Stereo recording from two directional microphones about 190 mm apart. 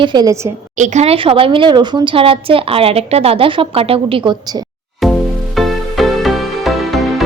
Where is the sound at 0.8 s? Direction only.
35° right (ahead or behind).